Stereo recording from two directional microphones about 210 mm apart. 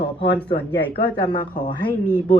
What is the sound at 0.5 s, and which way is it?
Speech, 50° left (ahead or behind).